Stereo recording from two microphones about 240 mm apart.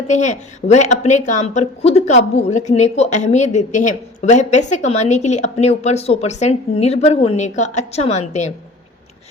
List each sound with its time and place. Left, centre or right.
0.1 s a woman's voice: left